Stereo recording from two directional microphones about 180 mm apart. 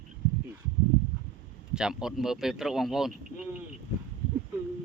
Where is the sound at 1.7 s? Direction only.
5° right (ahead or behind).